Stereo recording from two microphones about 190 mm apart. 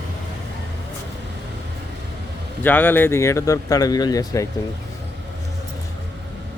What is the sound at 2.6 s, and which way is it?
Speech, 10° left (ahead or behind).